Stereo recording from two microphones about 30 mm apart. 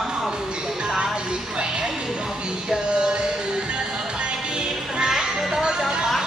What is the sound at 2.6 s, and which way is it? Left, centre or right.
Music, right.